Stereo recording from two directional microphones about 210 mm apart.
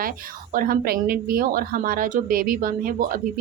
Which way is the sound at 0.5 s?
45° right (ahead or behind).